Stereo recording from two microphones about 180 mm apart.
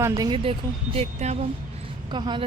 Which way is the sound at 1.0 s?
40° right (ahead or behind).